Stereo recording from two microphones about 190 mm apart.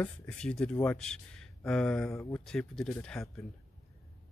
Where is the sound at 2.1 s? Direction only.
15° left (ahead or behind).